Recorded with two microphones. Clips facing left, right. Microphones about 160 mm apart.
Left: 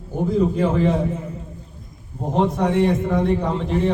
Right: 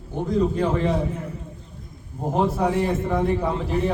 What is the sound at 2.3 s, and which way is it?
A man's voice, 5° right (ahead or behind).